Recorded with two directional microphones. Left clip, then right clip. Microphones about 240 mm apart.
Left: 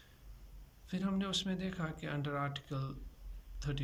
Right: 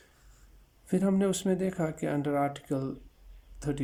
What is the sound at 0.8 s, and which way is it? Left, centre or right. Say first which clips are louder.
Speech: right 11 dB; right.